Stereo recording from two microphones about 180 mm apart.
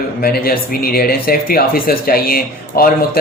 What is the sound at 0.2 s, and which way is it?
Speech, 55° left (ahead or behind).